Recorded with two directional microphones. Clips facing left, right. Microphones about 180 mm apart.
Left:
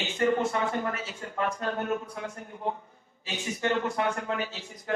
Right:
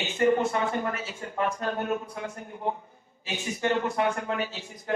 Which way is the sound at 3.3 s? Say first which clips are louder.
Right 1 dB; 15° right (ahead or behind).